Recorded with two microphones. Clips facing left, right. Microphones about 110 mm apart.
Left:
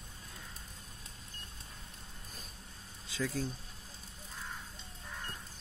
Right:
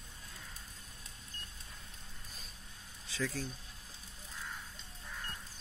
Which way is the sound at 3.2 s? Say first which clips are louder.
Left 2 dB; 15° left (ahead or behind).